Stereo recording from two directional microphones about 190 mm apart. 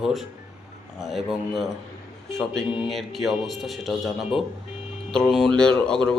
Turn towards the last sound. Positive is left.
turn(degrees=5)  # may be behind; listen again after turning